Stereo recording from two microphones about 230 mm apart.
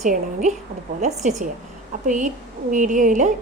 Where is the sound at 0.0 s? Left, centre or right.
Right.